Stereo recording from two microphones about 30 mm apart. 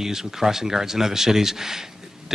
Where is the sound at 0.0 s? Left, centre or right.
Centre.